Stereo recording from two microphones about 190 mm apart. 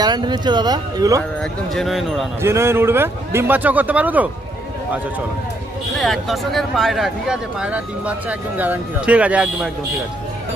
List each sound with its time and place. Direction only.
0.0 s speech: 20° right (ahead or behind)
1.4 s speech: centre (ahead or behind)
2.4 s speech: 15° right (ahead or behind)
6.0 s speech: centre (ahead or behind)